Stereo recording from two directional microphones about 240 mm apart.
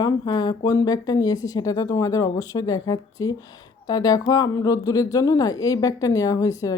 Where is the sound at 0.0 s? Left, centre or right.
Centre.